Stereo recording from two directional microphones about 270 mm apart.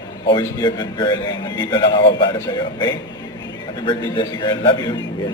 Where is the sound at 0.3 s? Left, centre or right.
Centre.